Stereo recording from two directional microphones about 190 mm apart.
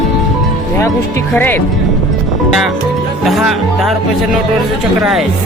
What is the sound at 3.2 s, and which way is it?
Speech, centre (ahead or behind).